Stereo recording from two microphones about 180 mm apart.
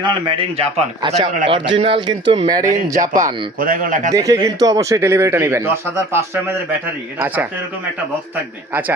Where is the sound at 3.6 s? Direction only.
50° right (ahead or behind).